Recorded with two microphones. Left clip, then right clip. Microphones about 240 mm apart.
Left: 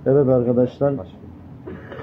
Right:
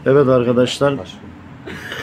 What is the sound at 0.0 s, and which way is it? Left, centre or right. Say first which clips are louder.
Speech: right 4 dB; right.